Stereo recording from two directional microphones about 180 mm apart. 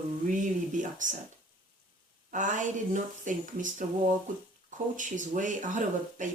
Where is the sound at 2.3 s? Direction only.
45° right (ahead or behind).